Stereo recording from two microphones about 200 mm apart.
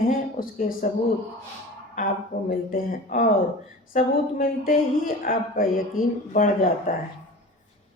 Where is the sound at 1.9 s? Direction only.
45° left (ahead or behind).